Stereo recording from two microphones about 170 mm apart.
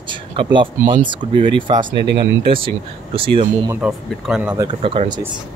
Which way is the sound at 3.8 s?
5° right (ahead or behind).